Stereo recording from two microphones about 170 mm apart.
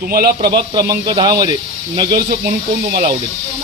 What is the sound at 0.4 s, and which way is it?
Speech, 25° right (ahead or behind).